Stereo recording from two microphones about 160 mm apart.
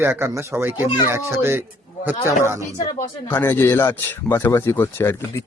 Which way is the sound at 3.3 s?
15° left (ahead or behind).